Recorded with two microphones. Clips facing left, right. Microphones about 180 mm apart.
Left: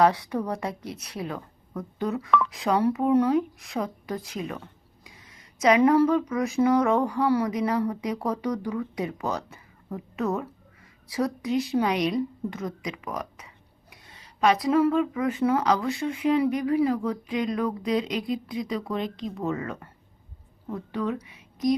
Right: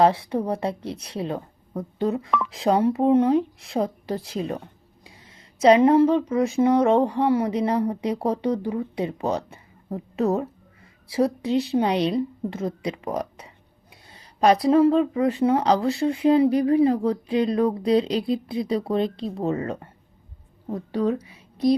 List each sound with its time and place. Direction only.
0.0 s a woman's voice: 25° right (ahead or behind)